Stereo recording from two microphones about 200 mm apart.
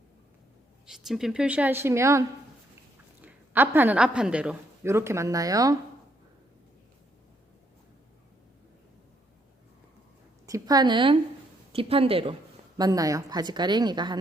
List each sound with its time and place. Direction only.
0.9 s a woman's voice: centre (ahead or behind); by 5.7 s 15° right (ahead or behind)
10.4 s a woman's voice: 15° right (ahead or behind)